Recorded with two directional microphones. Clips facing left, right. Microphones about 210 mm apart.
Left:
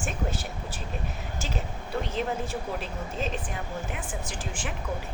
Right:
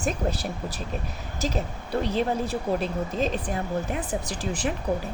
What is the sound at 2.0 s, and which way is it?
Speech, 35° right (ahead or behind).